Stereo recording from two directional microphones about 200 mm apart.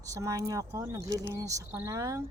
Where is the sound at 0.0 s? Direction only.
15° right (ahead or behind).